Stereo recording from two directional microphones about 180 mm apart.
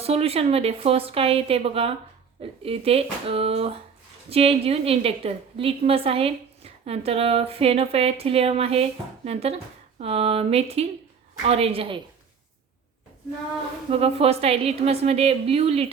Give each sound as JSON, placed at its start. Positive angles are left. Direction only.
{"t": 0.0, "sound": "a woman's voice", "side_deg": -35}
{"t": 13.9, "sound": "a woman's voice", "side_deg": -35}